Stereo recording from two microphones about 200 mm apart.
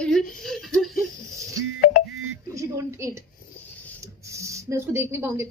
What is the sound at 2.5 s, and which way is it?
A woman's voice, 15° right (ahead or behind).